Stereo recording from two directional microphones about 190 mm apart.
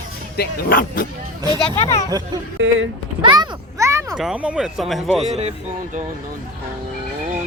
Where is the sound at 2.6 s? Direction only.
75° right (ahead or behind).